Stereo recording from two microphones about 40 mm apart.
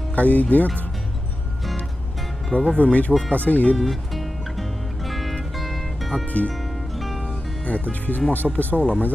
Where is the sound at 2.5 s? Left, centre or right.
Left.